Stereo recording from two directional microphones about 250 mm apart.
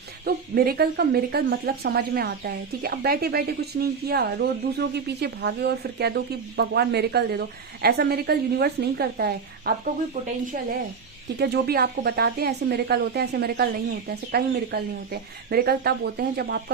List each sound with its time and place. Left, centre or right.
0.3 s speech: right
11.3 s speech: right